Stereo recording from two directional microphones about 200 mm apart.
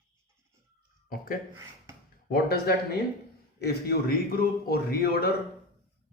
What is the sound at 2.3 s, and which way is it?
Speech, 50° left (ahead or behind).